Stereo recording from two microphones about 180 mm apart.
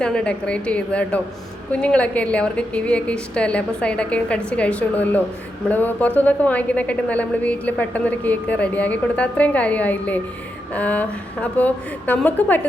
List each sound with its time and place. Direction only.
0.0 s a woman's voice: 5° left (ahead or behind)